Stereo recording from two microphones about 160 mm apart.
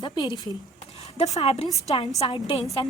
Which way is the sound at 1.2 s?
40° left (ahead or behind).